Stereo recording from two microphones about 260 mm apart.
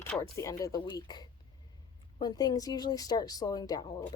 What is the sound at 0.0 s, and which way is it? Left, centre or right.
Speech, centre.